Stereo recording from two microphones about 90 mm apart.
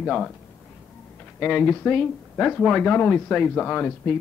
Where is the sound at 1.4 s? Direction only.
10° left (ahead or behind).